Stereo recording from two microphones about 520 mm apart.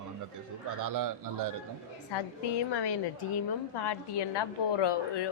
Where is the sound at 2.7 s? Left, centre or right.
Left.